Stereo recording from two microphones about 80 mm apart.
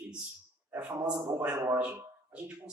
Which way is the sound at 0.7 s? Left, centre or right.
Right.